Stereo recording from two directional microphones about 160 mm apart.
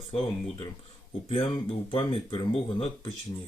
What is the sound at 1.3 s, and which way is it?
Speech, 35° left (ahead or behind).